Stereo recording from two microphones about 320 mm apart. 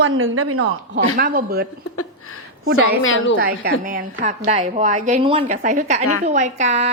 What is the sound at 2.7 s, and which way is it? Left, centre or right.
Speech, left.